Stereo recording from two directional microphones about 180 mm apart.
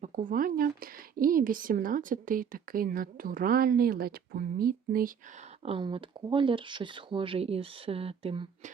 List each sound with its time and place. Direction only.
0.0 s speech: 45° right (ahead or behind)
5.6 s speech: 30° right (ahead or behind)